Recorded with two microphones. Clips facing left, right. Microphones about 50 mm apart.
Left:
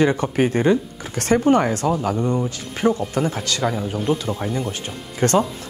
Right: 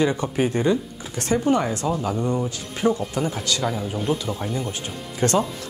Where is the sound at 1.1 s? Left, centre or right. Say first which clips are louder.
Left 4 dB; left.